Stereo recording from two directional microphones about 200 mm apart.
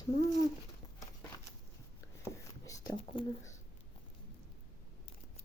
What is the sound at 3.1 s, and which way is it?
Speech, 25° left (ahead or behind).